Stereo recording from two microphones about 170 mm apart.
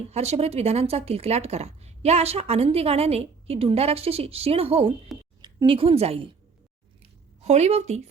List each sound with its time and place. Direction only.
0.1 s speech: 40° right (ahead or behind)
7.4 s speech: 40° right (ahead or behind)